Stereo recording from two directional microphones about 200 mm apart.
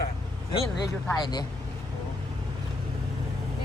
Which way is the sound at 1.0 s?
20° left (ahead or behind).